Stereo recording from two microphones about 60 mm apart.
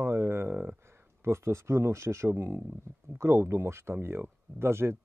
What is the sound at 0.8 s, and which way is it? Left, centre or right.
Speech, right.